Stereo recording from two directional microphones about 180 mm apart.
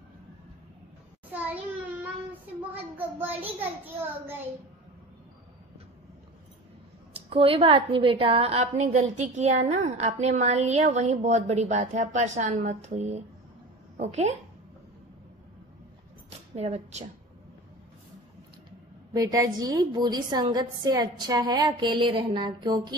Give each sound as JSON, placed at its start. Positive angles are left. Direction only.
{"t": 2.7, "sound": "a child's voice", "side_deg": -10}
{"t": 7.2, "sound": "a woman's voice", "side_deg": -30}
{"t": 16.3, "sound": "a sound", "side_deg": -35}
{"t": 19.1, "sound": "a woman's voice", "side_deg": -20}